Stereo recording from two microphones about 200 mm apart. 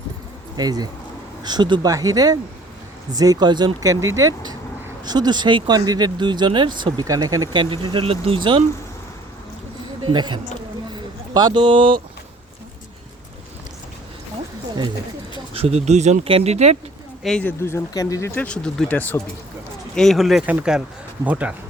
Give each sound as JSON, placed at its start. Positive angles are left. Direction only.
{"t": 0.5, "sound": "speech", "side_deg": -20}
{"t": 10.1, "sound": "speech", "side_deg": -25}
{"t": 10.9, "sound": "a sound", "side_deg": -20}
{"t": 15.5, "sound": "speech", "side_deg": -30}
{"t": 17.2, "sound": "speech", "side_deg": 5}